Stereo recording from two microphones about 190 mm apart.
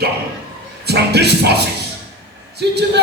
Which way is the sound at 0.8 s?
60° right (ahead or behind).